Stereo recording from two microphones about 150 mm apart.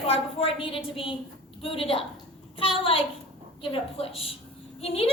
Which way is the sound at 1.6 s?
40° left (ahead or behind).